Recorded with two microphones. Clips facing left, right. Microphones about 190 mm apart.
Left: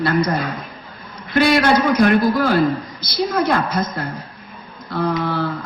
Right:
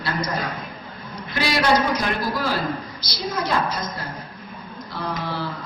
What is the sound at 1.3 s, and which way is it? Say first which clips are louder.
A man's voice: left 6 dB; 55° left (ahead or behind).